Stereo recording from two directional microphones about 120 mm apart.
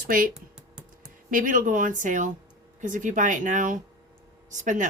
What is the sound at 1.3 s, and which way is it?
Speech, 90° right.